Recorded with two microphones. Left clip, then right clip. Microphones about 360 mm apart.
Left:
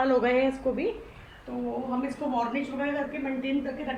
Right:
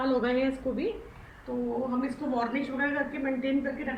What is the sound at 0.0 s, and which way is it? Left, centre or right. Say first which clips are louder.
Speech: left 4 dB; left.